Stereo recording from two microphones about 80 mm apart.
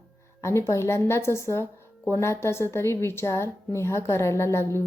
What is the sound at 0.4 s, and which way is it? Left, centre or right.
A woman's voice, left.